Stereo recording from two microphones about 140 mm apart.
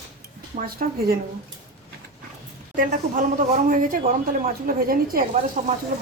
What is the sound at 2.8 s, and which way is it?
A man's voice, 70° right (ahead or behind).